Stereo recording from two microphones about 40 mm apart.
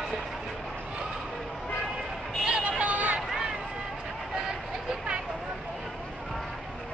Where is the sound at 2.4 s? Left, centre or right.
Right.